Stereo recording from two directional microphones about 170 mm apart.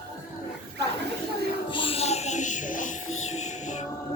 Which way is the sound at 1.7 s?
30° left (ahead or behind).